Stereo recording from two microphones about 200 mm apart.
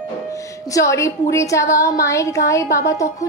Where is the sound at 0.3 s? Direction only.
15° left (ahead or behind).